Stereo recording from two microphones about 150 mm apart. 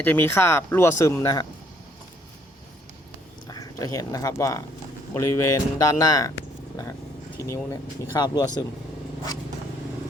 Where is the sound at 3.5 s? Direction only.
25° left (ahead or behind).